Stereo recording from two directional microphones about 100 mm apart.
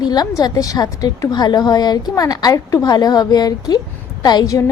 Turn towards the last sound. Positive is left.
turn(degrees=35)  # may be behind; listen again after turning